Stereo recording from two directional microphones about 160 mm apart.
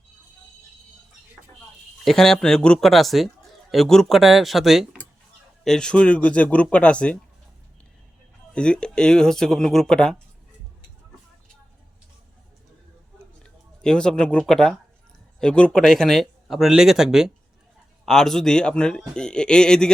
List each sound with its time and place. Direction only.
2.0 s a man's voice: 5° left (ahead or behind)
8.5 s a man's voice: 5° left (ahead or behind)
13.8 s a man's voice: 5° left (ahead or behind)